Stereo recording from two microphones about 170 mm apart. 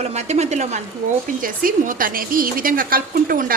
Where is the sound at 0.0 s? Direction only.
40° right (ahead or behind).